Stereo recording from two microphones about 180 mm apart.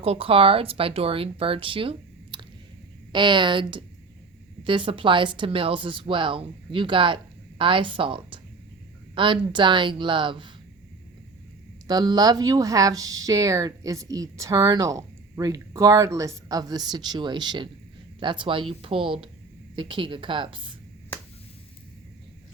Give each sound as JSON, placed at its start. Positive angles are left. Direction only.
{"t": 0.0, "sound": "speech", "side_deg": -30}
{"t": 11.9, "sound": "speech", "side_deg": -20}